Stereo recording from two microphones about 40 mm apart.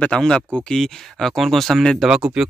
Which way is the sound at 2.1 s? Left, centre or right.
Centre.